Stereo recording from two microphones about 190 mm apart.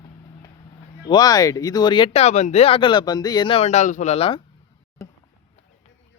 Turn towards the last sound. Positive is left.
turn(degrees=30)  # may be behind; listen again after turning